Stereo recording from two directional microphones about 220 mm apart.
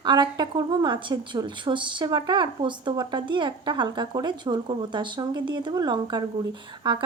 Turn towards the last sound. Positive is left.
turn(degrees=-20)  # may be behind; listen again after turning